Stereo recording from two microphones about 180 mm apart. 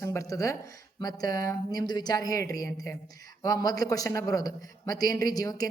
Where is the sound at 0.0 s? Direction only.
15° left (ahead or behind).